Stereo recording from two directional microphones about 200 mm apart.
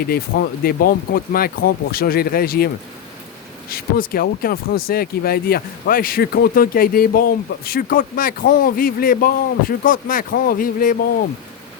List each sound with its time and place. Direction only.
0.0 s speech: 50° left (ahead or behind)
3.7 s speech: 45° left (ahead or behind)